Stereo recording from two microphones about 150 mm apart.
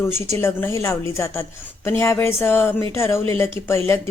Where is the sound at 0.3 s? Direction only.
15° left (ahead or behind).